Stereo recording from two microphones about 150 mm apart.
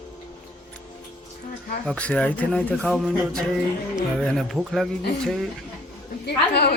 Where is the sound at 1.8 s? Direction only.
5° left (ahead or behind).